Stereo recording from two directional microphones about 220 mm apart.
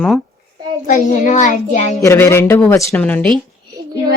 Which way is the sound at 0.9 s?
35° left (ahead or behind).